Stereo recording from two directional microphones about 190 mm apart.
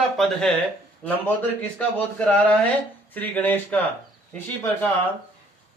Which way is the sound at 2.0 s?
5° left (ahead or behind).